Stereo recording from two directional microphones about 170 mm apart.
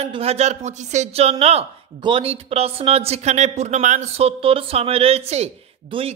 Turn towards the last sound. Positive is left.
turn(degrees=-30)  # may be behind; listen again after turning